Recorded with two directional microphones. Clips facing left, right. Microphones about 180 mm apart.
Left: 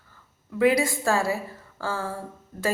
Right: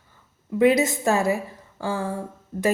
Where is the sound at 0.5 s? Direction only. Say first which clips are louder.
Right 3 dB; 20° right (ahead or behind).